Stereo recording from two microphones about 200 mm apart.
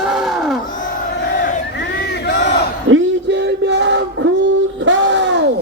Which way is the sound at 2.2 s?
60° left (ahead or behind).